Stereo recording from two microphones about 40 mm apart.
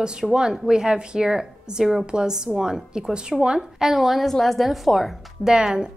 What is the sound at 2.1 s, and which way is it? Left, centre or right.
A woman's voice, centre.